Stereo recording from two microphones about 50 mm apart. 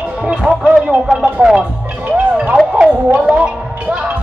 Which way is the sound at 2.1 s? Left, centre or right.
Centre.